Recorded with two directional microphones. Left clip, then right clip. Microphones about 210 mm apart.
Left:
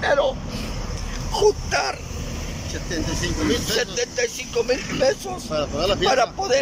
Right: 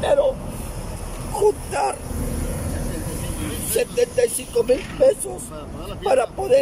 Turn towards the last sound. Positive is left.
turn(degrees=-15)  # may be behind; listen again after turning